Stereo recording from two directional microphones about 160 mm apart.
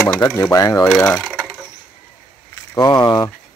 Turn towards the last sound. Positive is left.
turn(degrees=25)  # may be behind; listen again after turning